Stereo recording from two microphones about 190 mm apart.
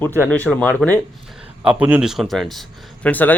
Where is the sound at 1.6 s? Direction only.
5° right (ahead or behind); by 3.3 s 10° left (ahead or behind).